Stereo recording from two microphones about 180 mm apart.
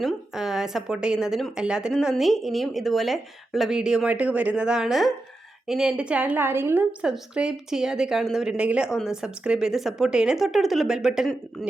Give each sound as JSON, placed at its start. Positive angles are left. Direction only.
{"t": 0.0, "sound": "a woman's voice", "side_deg": 0}